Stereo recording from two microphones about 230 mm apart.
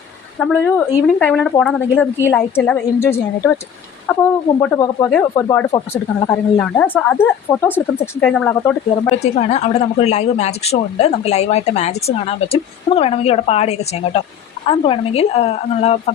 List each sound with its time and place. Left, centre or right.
0.3 s speech: centre
4.6 s speech: centre
9.2 s speech: left